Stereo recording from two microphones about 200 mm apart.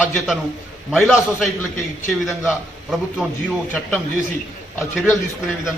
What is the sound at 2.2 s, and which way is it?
A man's voice, centre (ahead or behind).